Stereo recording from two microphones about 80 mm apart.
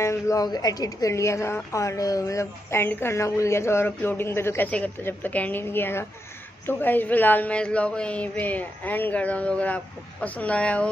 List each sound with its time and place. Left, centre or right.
0.0 s speech: left
0.4 s a woman's voice: left
4.6 s a woman's voice: centre